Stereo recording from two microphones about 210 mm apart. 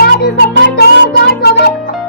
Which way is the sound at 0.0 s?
50° left (ahead or behind).